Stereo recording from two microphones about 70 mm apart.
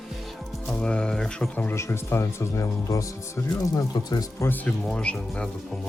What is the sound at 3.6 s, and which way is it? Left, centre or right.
Speech, left.